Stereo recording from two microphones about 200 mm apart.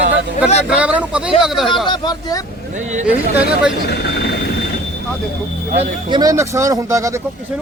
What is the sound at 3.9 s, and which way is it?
Speech, 60° left (ahead or behind).